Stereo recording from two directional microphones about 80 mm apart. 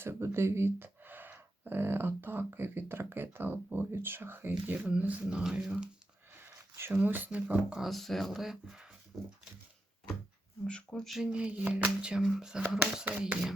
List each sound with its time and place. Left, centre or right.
0.0 s speech: right; by 5.9 s centre
6.4 s speech: right
7.8 s speech: centre
10.7 s speech: centre
11.0 s speech: centre
11.3 s speech: centre